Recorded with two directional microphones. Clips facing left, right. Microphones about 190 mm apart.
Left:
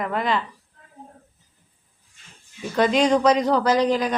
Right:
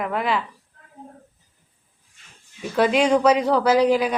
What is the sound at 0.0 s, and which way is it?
Speech, 5° right (ahead or behind).